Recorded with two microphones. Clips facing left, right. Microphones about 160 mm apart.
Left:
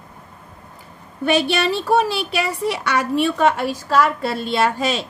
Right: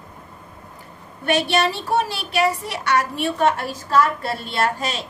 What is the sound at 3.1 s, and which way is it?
A woman's voice, 90° left.